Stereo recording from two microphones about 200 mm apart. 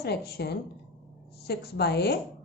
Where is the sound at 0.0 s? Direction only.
55° left (ahead or behind).